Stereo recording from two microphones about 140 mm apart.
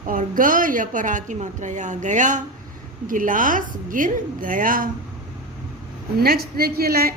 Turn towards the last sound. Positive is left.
turn(degrees=-90)